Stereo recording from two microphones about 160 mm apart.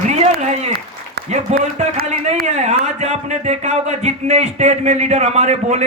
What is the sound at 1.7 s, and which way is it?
Speech, 45° right (ahead or behind).